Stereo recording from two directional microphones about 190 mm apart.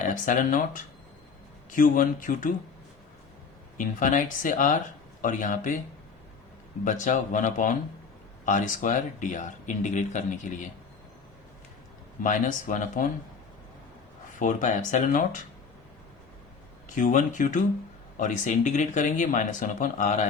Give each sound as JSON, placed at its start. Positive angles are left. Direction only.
{"t": 0.1, "sound": "speech", "side_deg": 45}
{"t": 3.8, "sound": "speech", "side_deg": 45}
{"t": 6.8, "sound": "speech", "side_deg": 40}
{"t": 12.2, "sound": "speech", "side_deg": 45}
{"t": 14.3, "sound": "speech", "side_deg": 45}
{"t": 16.9, "sound": "speech", "side_deg": 45}